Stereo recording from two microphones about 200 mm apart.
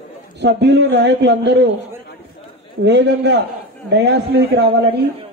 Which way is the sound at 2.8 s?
60° right (ahead or behind).